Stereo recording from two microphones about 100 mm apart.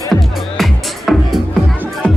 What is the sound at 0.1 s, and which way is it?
Music, centre (ahead or behind).